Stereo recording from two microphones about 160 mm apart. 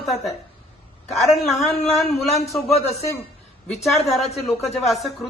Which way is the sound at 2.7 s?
40° left (ahead or behind).